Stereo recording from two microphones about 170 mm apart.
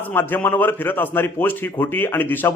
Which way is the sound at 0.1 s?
10° left (ahead or behind).